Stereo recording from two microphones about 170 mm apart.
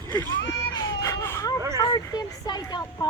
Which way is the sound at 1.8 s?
25° left (ahead or behind).